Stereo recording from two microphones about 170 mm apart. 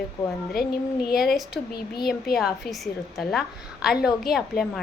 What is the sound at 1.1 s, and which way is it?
A woman's voice, centre (ahead or behind).